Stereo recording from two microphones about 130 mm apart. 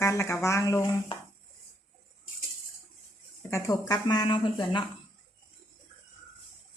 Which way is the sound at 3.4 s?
25° left (ahead or behind).